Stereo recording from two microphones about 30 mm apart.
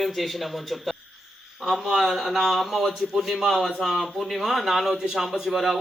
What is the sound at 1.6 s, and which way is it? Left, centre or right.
Speech, centre.